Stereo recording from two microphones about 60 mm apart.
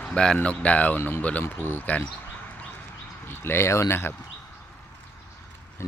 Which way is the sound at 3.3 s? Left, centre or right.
Left.